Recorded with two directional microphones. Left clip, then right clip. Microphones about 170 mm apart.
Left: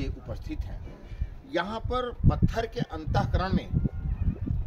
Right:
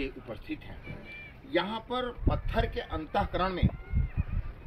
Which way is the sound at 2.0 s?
20° left (ahead or behind).